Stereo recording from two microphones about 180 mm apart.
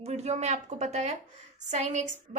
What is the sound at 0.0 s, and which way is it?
A woman's voice, 35° right (ahead or behind).